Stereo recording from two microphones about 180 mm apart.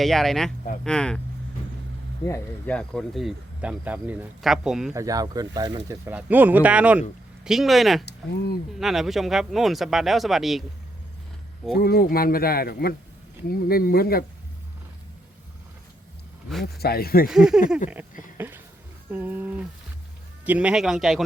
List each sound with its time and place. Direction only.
0.0 s speech: centre (ahead or behind)
2.2 s speech: 10° left (ahead or behind)
4.9 s speech: 20° right (ahead or behind)
6.1 s speech: 10° right (ahead or behind)
11.8 s speech: 55° left (ahead or behind)
16.7 s speech: 60° left (ahead or behind)
17.2 s speech: centre (ahead or behind)
18.3 s a sound: 10° right (ahead or behind)
19.1 s speech: 10° right (ahead or behind)